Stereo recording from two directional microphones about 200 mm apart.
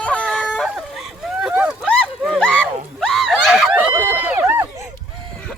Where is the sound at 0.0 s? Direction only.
5° left (ahead or behind).